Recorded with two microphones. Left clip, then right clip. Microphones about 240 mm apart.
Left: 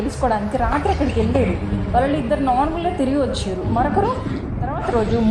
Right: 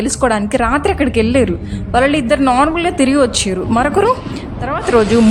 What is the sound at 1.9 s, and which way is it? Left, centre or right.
A woman's voice, right.